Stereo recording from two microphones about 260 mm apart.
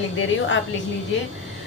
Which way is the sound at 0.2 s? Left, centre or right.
Left.